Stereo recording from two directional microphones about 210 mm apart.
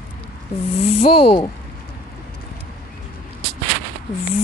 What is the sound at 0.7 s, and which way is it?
Speech, 30° left (ahead or behind).